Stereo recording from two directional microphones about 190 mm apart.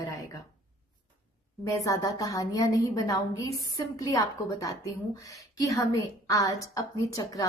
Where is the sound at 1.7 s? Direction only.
20° left (ahead or behind).